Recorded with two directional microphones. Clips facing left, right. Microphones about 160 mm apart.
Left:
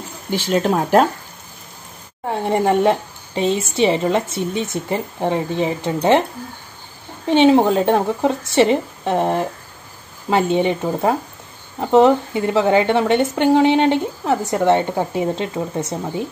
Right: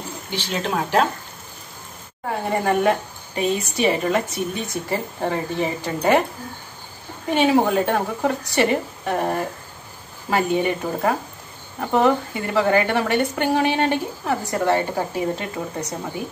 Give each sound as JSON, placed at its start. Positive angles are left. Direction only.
{"t": 0.3, "sound": "speech", "side_deg": 45}
{"t": 2.6, "sound": "a woman's voice", "side_deg": 25}
{"t": 7.2, "sound": "a woman's voice", "side_deg": 25}